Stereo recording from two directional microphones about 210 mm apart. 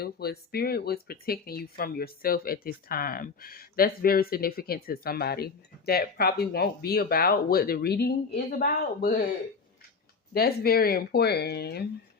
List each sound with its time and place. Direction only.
0.0 s speech: 50° left (ahead or behind)
10.3 s speech: 45° left (ahead or behind)